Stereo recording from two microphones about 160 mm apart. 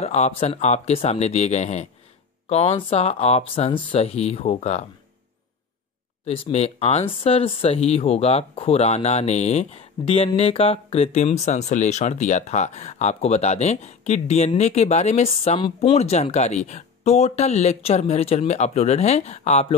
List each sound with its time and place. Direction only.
0.0 s speech: 45° left (ahead or behind)
6.2 s speech: 35° left (ahead or behind)